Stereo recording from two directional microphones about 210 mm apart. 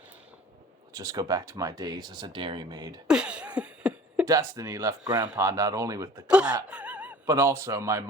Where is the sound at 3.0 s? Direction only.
5° right (ahead or behind).